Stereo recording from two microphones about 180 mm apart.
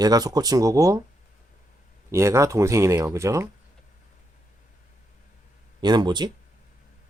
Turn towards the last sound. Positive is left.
turn(degrees=-25)  # may be behind; listen again after turning